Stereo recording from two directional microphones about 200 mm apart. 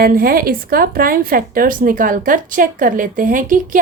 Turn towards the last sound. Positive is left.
turn(degrees=-40)  # may be behind; listen again after turning